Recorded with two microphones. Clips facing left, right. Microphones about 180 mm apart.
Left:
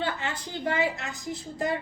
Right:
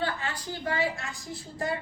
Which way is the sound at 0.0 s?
20° left (ahead or behind).